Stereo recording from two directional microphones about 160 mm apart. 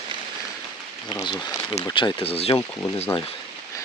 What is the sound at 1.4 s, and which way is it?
Speech, 25° left (ahead or behind).